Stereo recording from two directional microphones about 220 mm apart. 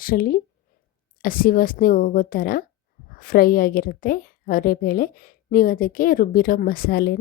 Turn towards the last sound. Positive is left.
turn(degrees=45)  # may be behind; listen again after turning